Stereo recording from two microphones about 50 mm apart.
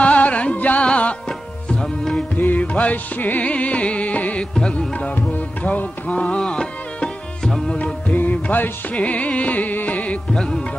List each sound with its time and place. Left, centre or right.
0.0 s music: left
2.3 s music: left
3.4 s music: left
6.2 s music: centre
8.1 s music: left
10.3 s music: centre